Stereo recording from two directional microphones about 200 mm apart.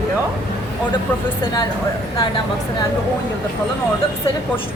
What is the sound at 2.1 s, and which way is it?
Speech, 20° left (ahead or behind).